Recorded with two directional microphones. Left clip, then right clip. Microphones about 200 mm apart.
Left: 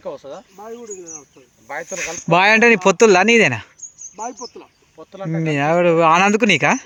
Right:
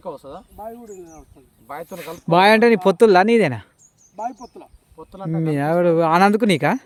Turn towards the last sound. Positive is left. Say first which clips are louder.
# left 3 dB
turn(degrees=-15)  # may be behind; listen again after turning